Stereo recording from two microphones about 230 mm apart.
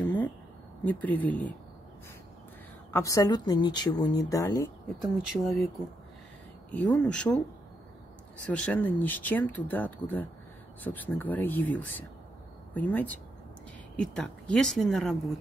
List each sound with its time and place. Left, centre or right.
0.0 s a sound: centre
0.8 s speech: centre
2.9 s speech: centre
5.0 s speech: centre
6.7 s speech: centre
8.5 s speech: centre